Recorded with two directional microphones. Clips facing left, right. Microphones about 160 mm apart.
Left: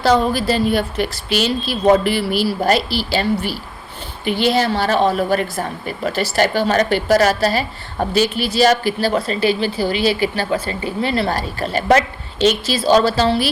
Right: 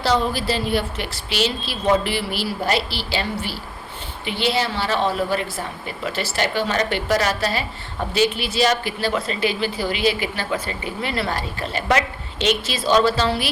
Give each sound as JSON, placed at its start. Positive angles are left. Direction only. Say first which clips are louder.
{"t": 0.0, "sound": "a woman's voice", "louder": "left 5 dB", "side_deg": 45}